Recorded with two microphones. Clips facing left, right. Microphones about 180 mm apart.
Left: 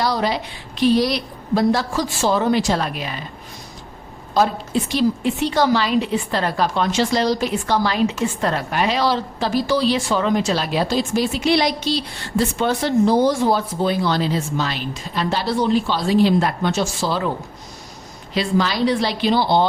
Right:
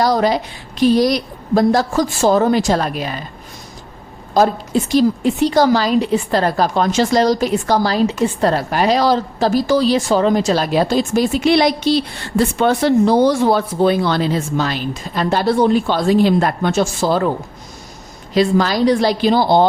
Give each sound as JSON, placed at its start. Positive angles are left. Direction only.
{"t": 0.0, "sound": "a woman's voice", "side_deg": -45}
{"t": 4.4, "sound": "a woman's voice", "side_deg": -45}
{"t": 18.3, "sound": "a woman's voice", "side_deg": -45}